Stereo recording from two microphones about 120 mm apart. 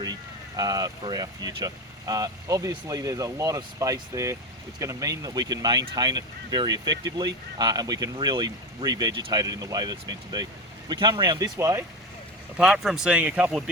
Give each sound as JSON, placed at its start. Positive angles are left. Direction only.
{"t": 0.0, "sound": "speech", "side_deg": -35}
{"t": 12.5, "sound": "speech", "side_deg": -5}